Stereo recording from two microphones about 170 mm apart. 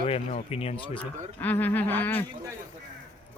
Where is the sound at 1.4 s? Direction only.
10° left (ahead or behind).